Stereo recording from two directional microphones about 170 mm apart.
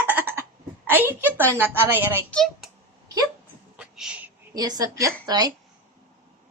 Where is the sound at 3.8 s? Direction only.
5° right (ahead or behind).